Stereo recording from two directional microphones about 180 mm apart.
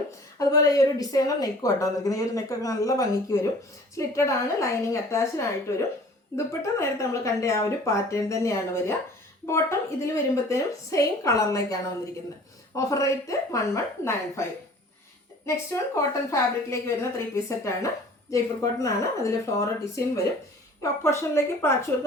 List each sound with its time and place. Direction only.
0.3 s a woman's voice: 20° left (ahead or behind)
15.4 s a woman's voice: 15° left (ahead or behind)